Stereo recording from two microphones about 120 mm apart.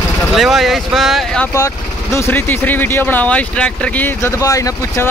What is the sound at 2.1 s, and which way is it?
Speech, 15° left (ahead or behind).